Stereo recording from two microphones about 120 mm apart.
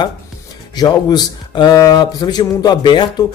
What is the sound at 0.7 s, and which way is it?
Speech, 35° left (ahead or behind).